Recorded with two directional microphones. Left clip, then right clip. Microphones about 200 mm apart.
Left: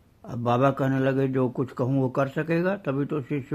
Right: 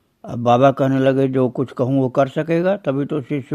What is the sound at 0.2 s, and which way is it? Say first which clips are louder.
A man's voice: right 9 dB; 35° right (ahead or behind).